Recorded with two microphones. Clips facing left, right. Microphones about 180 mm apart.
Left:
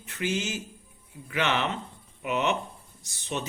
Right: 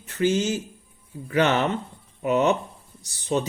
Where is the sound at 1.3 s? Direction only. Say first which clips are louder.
Right 7 dB; 40° right (ahead or behind).